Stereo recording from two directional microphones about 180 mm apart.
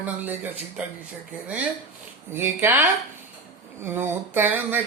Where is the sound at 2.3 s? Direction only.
15° right (ahead or behind).